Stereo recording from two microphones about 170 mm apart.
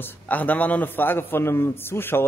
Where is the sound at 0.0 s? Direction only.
10° left (ahead or behind).